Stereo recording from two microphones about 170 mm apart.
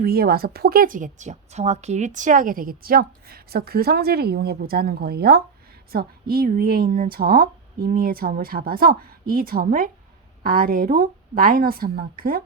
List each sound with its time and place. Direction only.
0.0 s a woman's voice: 65° right (ahead or behind)